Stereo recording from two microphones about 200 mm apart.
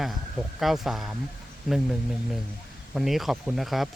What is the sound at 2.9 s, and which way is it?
Speech, centre (ahead or behind).